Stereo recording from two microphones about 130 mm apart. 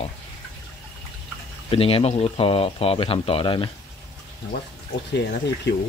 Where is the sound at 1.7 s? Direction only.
50° left (ahead or behind).